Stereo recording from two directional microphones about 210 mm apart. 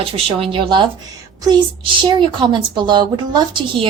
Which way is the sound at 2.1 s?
20° right (ahead or behind).